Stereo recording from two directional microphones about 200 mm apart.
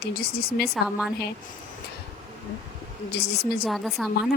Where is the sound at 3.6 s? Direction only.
Centre (ahead or behind).